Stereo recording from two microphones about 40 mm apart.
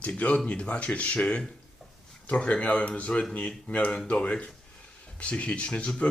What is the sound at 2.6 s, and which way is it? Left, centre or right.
Speech, left.